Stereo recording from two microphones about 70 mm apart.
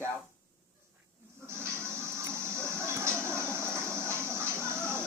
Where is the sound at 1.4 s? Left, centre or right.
Right.